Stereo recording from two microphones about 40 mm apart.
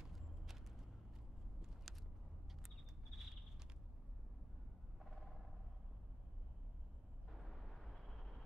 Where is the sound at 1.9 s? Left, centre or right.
Centre.